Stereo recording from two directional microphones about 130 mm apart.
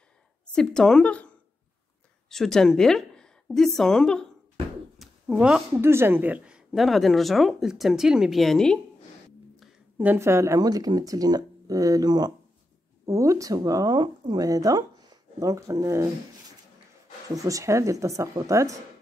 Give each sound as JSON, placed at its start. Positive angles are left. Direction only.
{"t": 0.6, "sound": "a woman's voice", "side_deg": 5}
{"t": 4.9, "sound": "a sound", "side_deg": 0}
{"t": 5.9, "sound": "speech", "side_deg": -20}
{"t": 9.9, "sound": "speech", "side_deg": -15}
{"t": 17.3, "sound": "speech", "side_deg": -25}